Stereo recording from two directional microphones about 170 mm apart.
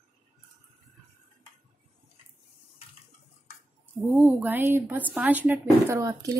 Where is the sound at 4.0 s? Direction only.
5° right (ahead or behind).